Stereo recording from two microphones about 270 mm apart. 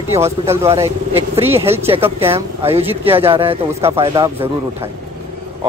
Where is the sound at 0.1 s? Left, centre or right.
Centre.